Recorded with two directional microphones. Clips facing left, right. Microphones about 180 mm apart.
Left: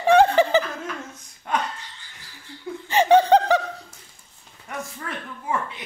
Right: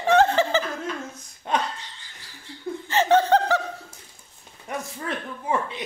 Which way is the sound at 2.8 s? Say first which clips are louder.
Left 3 dB; 15° left (ahead or behind).